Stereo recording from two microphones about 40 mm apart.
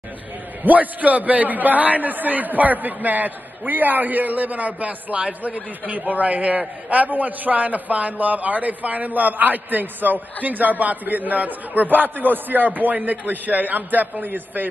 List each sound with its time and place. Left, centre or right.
0.7 s a man's voice: right